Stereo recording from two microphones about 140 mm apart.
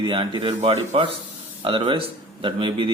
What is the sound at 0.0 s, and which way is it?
Speech, 40° right (ahead or behind).